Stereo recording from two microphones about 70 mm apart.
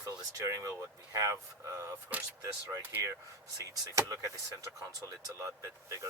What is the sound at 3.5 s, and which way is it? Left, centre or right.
Speech, right.